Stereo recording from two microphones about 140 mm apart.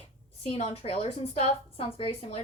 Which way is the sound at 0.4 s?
50° left (ahead or behind).